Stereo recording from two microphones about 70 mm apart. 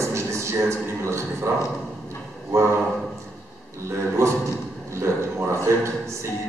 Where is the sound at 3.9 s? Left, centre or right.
Right.